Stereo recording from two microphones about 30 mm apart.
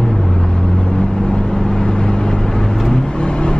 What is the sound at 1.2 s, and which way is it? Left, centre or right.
Vehicle, left.